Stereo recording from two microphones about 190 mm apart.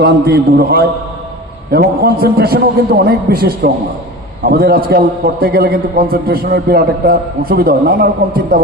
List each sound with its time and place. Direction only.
0.0 s a man's voice: 55° right (ahead or behind)